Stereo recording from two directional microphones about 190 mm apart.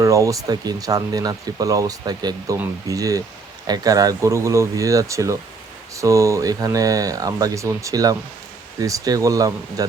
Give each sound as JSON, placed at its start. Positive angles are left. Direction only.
{"t": 0.0, "sound": "speech", "side_deg": -15}